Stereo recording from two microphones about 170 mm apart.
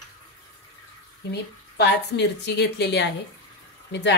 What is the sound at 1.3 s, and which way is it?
Speech, 80° left.